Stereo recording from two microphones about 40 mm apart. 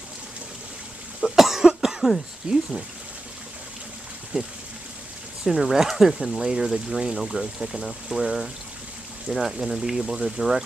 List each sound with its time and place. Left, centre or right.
1.2 s cough: centre
1.6 s cough: centre
4.3 s speech: centre
5.4 s speech: centre